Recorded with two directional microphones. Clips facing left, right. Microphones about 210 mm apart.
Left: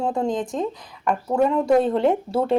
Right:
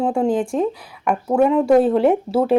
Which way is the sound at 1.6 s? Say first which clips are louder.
Right 4 dB; 5° right (ahead or behind).